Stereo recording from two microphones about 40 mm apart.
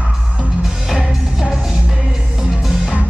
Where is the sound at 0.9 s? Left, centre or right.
Centre.